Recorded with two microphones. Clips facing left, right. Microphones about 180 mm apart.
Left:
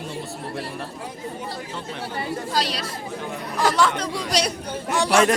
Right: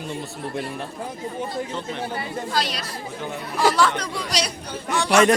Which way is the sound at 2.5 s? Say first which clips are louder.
Even; 35° left (ahead or behind).